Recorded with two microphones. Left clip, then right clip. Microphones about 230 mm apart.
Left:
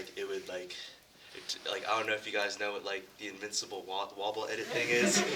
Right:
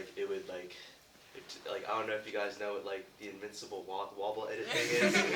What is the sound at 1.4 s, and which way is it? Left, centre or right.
Speech, left.